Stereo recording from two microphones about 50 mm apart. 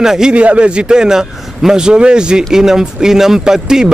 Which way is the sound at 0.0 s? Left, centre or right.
Centre.